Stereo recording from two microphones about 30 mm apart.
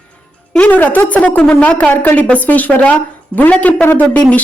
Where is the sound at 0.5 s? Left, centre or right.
Left.